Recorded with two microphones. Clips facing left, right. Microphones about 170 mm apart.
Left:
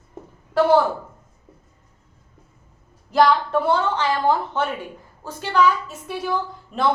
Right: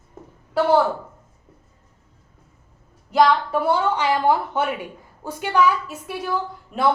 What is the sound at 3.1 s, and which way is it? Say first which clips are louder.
A woman's voice: even; 10° right (ahead or behind).